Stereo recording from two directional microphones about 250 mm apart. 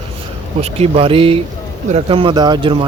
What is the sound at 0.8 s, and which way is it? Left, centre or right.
Speech, right.